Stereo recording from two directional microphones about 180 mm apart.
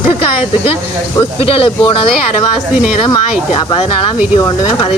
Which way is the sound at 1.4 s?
30° left (ahead or behind).